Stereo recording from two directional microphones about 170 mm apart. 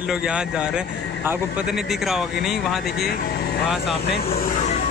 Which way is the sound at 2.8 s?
65° left (ahead or behind).